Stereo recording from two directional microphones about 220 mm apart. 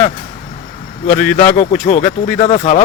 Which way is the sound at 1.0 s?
35° left (ahead or behind).